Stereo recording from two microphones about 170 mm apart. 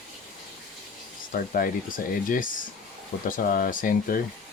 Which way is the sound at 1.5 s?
55° left (ahead or behind).